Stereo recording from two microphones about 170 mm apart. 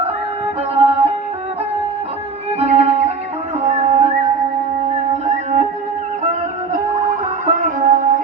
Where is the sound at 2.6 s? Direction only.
40° right (ahead or behind).